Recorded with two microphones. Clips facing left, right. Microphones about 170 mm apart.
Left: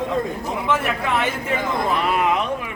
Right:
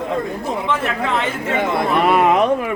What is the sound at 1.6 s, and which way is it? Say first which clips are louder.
Speech: right 6 dB; 70° right (ahead or behind).